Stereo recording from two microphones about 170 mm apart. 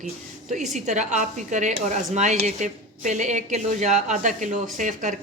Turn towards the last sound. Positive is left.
turn(degrees=-50)  # may be behind; listen again after turning